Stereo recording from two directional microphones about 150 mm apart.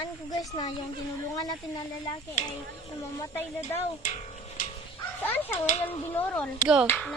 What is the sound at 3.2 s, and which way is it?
Speech, 20° left (ahead or behind).